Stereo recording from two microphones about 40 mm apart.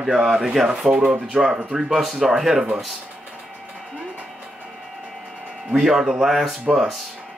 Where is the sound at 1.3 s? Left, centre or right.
Right.